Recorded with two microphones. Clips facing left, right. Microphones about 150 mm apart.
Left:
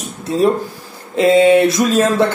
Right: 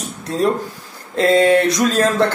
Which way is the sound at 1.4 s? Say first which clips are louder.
Left 3 dB; 5° left (ahead or behind).